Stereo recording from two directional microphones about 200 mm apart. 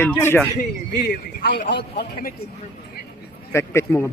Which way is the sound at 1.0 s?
55° left (ahead or behind).